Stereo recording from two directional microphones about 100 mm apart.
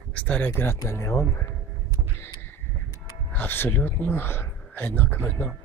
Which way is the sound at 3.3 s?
20° left (ahead or behind).